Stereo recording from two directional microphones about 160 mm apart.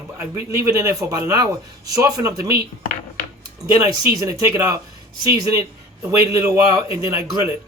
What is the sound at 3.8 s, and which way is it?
Speech, 20° right (ahead or behind).